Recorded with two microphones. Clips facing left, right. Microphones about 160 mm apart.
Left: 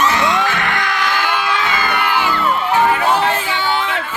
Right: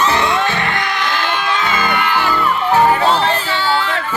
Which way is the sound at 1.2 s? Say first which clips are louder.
Even; 10° left (ahead or behind).